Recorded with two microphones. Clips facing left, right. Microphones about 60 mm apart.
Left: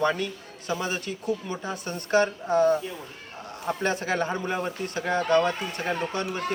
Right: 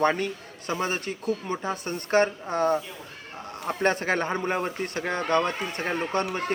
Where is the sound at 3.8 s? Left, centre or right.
Right.